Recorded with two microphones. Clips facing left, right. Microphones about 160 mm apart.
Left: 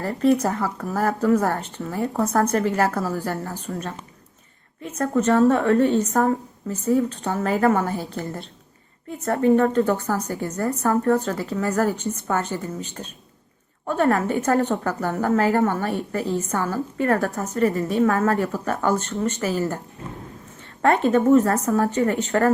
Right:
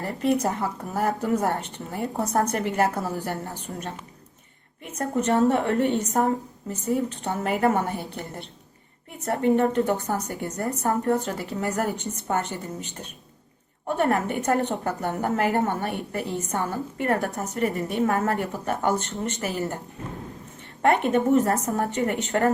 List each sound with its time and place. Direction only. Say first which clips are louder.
0.0 s speech: left 4 dB; 15° right (ahead or behind)
4.9 s a woman's voice: left 4 dB; 20° right (ahead or behind)
9.2 s a woman's voice: left 3 dB; 20° right (ahead or behind)
13.8 s a woman's voice: left 3 dB; 20° right (ahead or behind)
20.8 s a woman's voice: left 3 dB; 20° right (ahead or behind)